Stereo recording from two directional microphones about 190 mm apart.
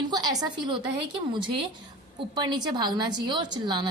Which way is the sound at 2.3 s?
20° right (ahead or behind).